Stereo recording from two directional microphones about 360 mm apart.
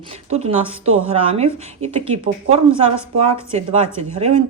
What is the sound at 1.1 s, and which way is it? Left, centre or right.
Speech, centre.